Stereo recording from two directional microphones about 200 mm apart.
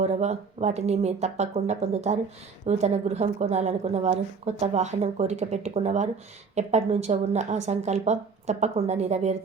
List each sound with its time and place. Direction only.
0.0 s a woman's voice: 35° right (ahead or behind)